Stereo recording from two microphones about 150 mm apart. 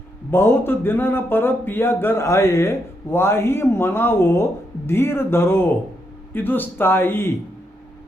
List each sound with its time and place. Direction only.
0.3 s speech: 15° left (ahead or behind)